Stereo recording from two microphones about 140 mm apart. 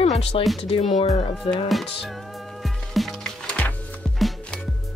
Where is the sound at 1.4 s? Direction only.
40° left (ahead or behind).